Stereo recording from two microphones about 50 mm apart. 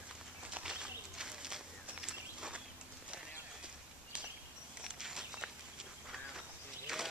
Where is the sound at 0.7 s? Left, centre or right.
Centre.